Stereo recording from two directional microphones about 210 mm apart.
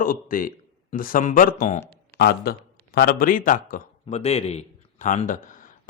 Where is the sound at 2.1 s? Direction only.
50° left (ahead or behind).